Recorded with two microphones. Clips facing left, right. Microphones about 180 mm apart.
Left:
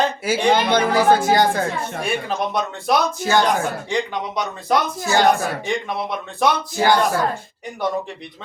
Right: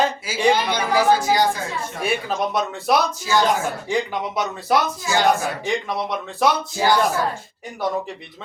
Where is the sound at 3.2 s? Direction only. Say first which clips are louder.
Left 3 dB; 55° left (ahead or behind).